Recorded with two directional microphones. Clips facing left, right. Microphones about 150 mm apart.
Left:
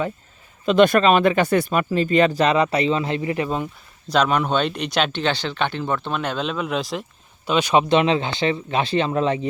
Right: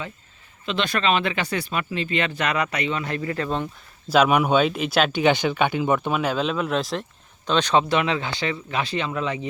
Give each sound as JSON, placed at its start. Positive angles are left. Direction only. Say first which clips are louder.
{"t": 0.6, "sound": "speech", "louder": "left 9 dB", "side_deg": 45}
{"t": 4.1, "sound": "speech", "louder": "right 2 dB", "side_deg": -10}
{"t": 7.9, "sound": "speech", "louder": "left 5 dB", "side_deg": 25}